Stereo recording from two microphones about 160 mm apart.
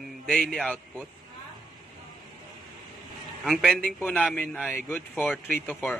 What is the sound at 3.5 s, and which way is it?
A man's voice, centre (ahead or behind).